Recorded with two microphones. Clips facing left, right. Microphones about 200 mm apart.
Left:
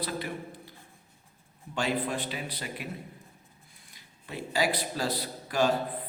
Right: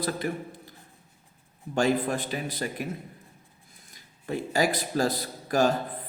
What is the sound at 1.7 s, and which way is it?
A man's voice, 45° right (ahead or behind).